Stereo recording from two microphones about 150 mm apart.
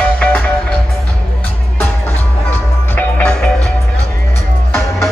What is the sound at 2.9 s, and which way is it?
Music, 10° left (ahead or behind).